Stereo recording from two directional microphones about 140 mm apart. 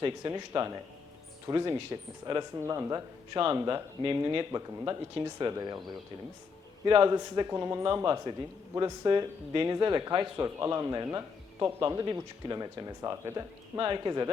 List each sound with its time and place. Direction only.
0.0 s speech: 30° right (ahead or behind)